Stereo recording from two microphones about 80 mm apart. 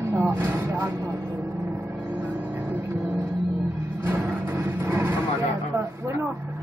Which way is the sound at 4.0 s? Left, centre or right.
Right.